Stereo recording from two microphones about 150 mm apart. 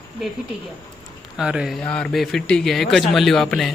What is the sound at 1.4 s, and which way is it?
Speech, 5° right (ahead or behind).